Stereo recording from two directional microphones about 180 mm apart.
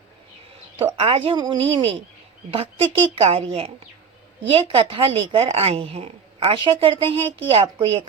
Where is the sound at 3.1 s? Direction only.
35° right (ahead or behind).